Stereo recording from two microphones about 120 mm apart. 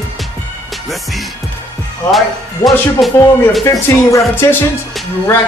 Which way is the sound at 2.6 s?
20° left (ahead or behind).